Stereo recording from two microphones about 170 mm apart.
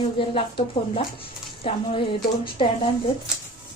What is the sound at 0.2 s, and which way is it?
Speech, 30° left (ahead or behind).